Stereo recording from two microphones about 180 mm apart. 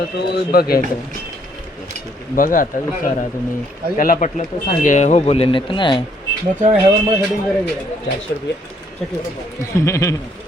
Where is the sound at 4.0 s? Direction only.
45° left (ahead or behind); by 6.0 s 30° left (ahead or behind).